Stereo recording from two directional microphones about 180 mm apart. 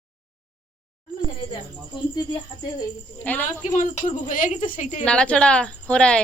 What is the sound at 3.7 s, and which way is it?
A woman's voice, 40° left (ahead or behind).